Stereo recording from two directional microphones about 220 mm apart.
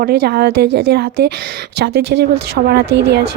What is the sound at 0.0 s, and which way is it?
A woman's voice, 45° right (ahead or behind).